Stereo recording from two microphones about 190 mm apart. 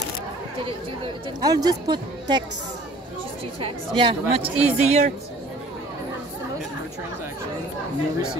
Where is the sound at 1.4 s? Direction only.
20° right (ahead or behind).